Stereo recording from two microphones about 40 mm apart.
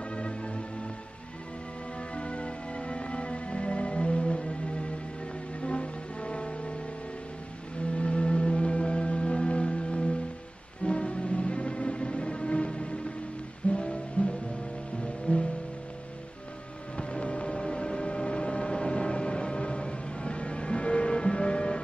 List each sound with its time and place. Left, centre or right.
0.1 s music: left
2.1 s music: left
7.9 s music: left
16.9 s music: left